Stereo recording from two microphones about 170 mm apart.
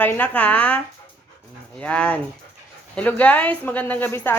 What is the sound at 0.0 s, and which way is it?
Speech, 10° left (ahead or behind).